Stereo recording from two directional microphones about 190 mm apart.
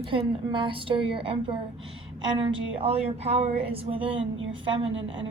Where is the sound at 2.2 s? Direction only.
25° right (ahead or behind).